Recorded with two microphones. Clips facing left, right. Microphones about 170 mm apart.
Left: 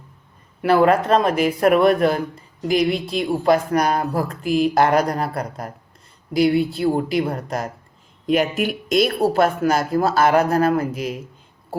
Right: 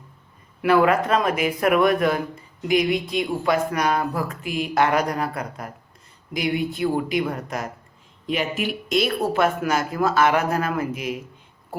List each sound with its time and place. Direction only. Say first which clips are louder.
0.6 s speech: left 2 dB; 30° left (ahead or behind)
8.3 s speech: left 6 dB; 45° left (ahead or behind)